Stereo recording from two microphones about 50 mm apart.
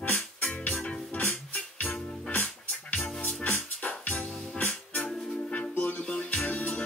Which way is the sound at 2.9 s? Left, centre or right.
Centre.